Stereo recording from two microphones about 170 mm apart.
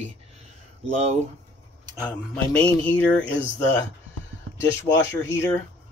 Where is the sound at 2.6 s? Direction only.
10° left (ahead or behind).